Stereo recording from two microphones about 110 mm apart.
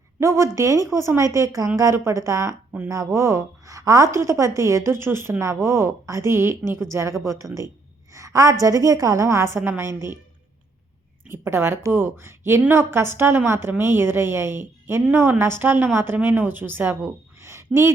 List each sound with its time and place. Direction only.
0.2 s a woman's voice: 30° right (ahead or behind)
11.3 s a woman's voice: 25° right (ahead or behind)